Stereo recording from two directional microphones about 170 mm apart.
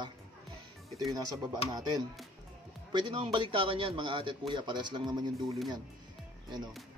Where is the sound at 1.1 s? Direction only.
20° right (ahead or behind).